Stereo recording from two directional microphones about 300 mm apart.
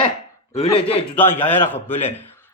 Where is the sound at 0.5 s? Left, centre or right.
Centre.